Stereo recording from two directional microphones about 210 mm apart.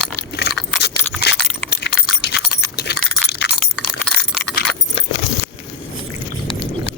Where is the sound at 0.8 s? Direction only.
55° left (ahead or behind).